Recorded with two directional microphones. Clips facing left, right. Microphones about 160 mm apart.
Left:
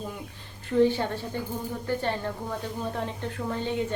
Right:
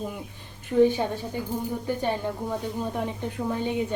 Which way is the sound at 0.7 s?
15° right (ahead or behind).